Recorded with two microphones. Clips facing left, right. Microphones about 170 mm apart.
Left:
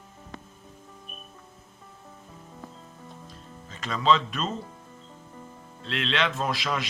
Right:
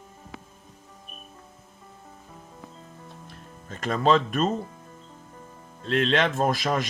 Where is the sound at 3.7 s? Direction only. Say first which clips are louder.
Right 2 dB; 50° right (ahead or behind).